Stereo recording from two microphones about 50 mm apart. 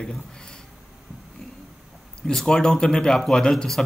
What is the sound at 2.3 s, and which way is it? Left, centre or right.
Speech, centre.